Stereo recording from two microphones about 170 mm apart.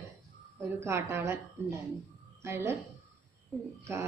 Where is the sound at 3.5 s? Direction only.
5° left (ahead or behind).